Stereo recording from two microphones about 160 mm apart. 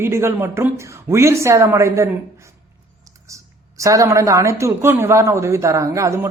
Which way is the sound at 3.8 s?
20° right (ahead or behind).